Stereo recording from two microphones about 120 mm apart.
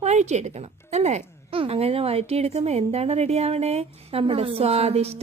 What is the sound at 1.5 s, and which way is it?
A woman's voice, 50° right (ahead or behind).